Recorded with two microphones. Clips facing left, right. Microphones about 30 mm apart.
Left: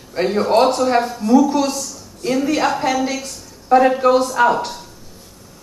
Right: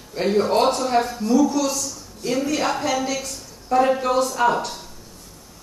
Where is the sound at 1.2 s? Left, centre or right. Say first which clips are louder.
Left 8 dB; centre.